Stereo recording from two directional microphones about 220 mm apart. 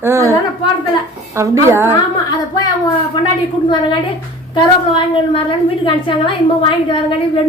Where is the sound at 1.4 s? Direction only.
10° right (ahead or behind).